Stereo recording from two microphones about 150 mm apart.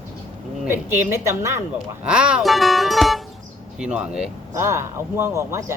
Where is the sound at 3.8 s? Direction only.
5° right (ahead or behind).